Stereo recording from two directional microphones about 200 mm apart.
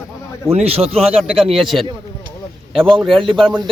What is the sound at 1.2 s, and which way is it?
Speech, centre (ahead or behind).